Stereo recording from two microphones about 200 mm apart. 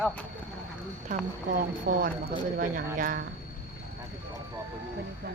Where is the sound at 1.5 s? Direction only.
45° right (ahead or behind).